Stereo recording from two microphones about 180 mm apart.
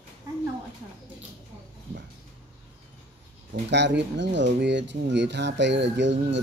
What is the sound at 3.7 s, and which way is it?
Speech, 75° right (ahead or behind).